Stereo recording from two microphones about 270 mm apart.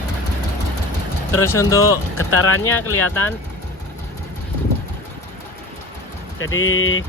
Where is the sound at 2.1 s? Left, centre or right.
Left.